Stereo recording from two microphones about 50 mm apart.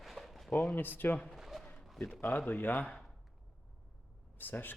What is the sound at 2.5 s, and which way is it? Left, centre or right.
Speech, left.